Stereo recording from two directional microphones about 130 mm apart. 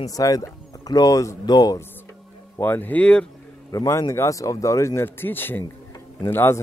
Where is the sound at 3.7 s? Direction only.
25° left (ahead or behind).